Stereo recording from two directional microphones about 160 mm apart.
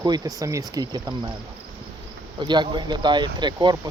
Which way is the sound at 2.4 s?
30° right (ahead or behind).